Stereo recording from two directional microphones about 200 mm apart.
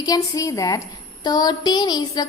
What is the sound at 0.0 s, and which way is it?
A woman's voice, 15° left (ahead or behind).